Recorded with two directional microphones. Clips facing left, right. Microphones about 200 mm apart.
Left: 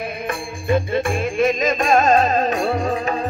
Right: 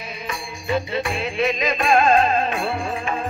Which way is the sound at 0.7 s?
50° left (ahead or behind).